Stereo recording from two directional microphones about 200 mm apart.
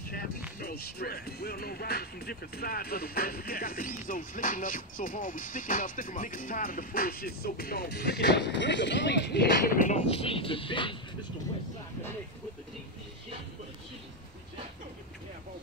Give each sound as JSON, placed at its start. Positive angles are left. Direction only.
{"t": 0.6, "sound": "speech", "side_deg": 50}